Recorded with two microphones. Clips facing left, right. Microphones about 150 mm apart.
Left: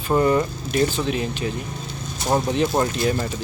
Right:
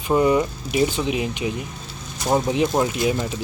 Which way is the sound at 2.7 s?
10° right (ahead or behind).